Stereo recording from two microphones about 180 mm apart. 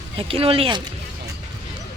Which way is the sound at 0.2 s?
30° right (ahead or behind).